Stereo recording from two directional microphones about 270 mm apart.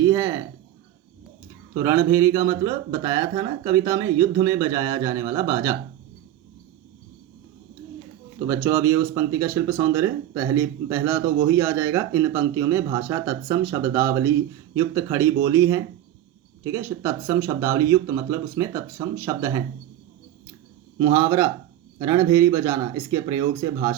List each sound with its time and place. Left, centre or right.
0.0 s a sound: centre
1.7 s speech: centre
8.4 s speech: centre
21.0 s speech: centre